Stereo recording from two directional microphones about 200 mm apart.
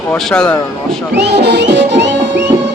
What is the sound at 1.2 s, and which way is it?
Music, 55° right (ahead or behind).